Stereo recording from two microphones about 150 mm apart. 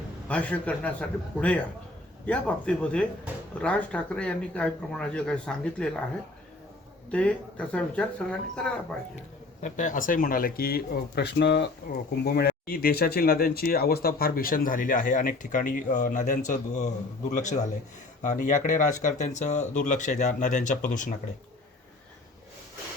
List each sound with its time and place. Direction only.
0.3 s speech: 10° left (ahead or behind)
7.1 s speech: 10° left (ahead or behind)
9.6 s a man's voice: 55° left (ahead or behind)